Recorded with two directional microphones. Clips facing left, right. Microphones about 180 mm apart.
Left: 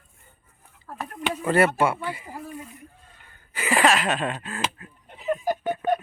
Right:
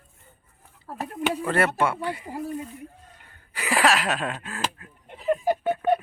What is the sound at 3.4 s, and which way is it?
Speech, centre (ahead or behind).